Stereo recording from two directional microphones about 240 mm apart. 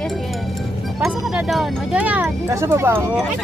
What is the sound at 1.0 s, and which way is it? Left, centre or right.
Speech, centre.